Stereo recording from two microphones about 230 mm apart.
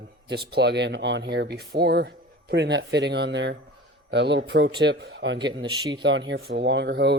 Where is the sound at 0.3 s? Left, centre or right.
Right.